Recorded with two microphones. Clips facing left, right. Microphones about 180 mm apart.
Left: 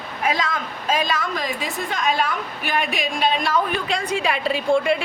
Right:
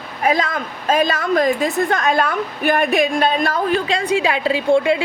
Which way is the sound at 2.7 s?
50° right (ahead or behind).